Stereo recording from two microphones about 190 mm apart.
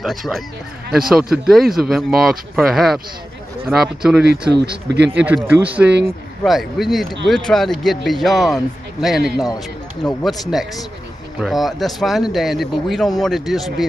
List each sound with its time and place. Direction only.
0.0 s speech: centre (ahead or behind)
4.3 s speech: 60° right (ahead or behind)
5.1 s speech: 10° right (ahead or behind)
10.0 s speech: centre (ahead or behind)